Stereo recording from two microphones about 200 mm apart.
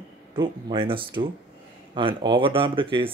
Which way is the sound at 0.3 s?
25° right (ahead or behind).